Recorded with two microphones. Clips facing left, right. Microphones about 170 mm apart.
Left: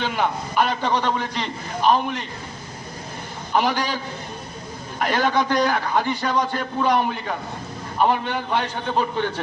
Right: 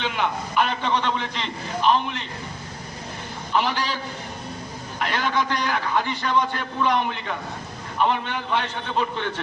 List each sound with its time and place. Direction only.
0.0 s a man's voice: 40° left (ahead or behind)
3.5 s a man's voice: 45° left (ahead or behind)
4.9 s a man's voice: 45° left (ahead or behind)